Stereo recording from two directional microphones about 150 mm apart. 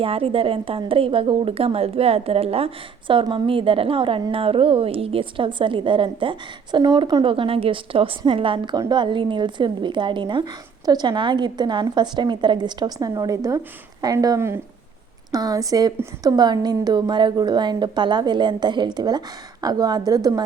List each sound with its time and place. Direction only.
0.0 s a woman's voice: 40° right (ahead or behind)